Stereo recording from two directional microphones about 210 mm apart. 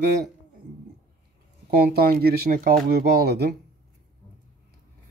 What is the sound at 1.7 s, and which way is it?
Speech, 45° right (ahead or behind).